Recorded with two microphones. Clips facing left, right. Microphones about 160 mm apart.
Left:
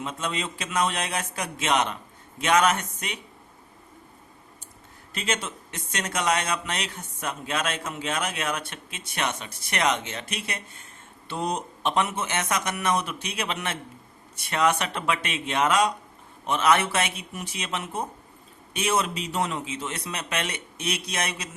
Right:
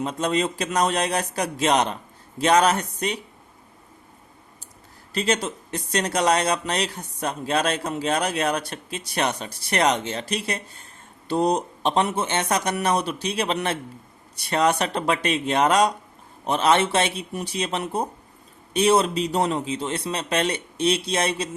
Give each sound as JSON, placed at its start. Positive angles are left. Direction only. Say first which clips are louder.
{"t": 0.0, "sound": "speech", "louder": "right 7 dB", "side_deg": -40}
{"t": 5.1, "sound": "speech", "louder": "right 6 dB", "side_deg": -35}